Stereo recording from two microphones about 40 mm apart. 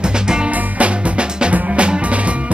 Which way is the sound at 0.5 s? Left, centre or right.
Right.